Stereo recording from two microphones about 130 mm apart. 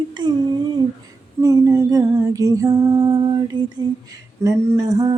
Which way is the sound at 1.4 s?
25° right (ahead or behind).